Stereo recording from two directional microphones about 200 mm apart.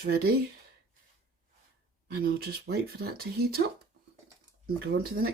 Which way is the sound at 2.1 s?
50° right (ahead or behind).